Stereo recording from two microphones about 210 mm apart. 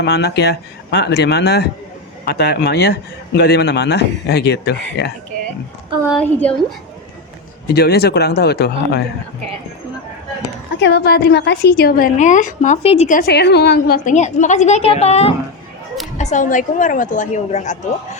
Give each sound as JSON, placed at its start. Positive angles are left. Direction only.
{"t": 0.0, "sound": "a man's voice", "side_deg": 50}
{"t": 6.1, "sound": "a woman's voice", "side_deg": 5}
{"t": 7.7, "sound": "a man's voice", "side_deg": 50}
{"t": 10.8, "sound": "a woman's voice", "side_deg": 55}